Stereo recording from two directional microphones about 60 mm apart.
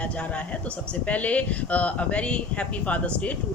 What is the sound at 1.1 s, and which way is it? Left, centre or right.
Speech, left.